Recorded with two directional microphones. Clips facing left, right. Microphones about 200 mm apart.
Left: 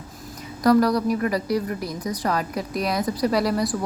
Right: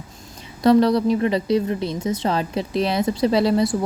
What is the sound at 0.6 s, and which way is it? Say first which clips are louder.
A woman's voice: right 3 dB; 25° right (ahead or behind).